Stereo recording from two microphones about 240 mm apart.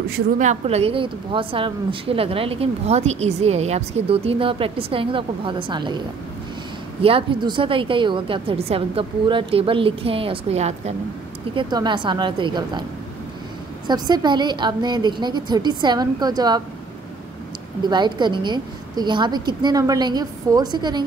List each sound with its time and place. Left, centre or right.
0.4 s a woman's voice: right
13.8 s a woman's voice: centre
17.8 s a woman's voice: centre